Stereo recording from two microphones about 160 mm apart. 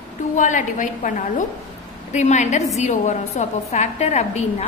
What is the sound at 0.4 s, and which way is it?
A woman's voice, 50° left (ahead or behind).